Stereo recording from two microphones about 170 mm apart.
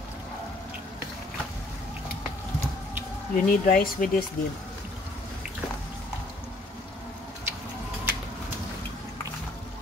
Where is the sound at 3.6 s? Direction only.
55° left (ahead or behind).